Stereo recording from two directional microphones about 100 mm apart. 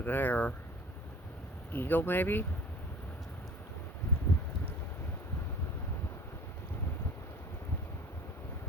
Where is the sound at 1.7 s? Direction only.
20° left (ahead or behind).